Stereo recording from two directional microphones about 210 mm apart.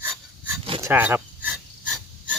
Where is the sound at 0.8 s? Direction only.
10° right (ahead or behind).